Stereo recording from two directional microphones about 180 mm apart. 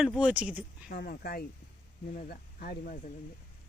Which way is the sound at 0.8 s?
55° left (ahead or behind).